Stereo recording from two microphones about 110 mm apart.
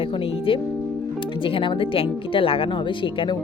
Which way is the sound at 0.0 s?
55° left (ahead or behind).